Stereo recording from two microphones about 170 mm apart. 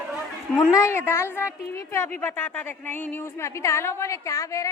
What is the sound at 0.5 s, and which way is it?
A woman's voice, 20° left (ahead or behind).